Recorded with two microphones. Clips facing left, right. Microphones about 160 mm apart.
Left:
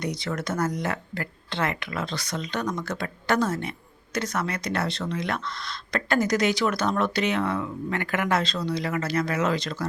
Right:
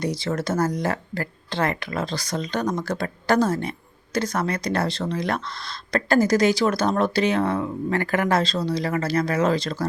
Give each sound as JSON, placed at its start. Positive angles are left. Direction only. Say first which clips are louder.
{"t": 0.0, "sound": "speech", "louder": "right 4 dB", "side_deg": -30}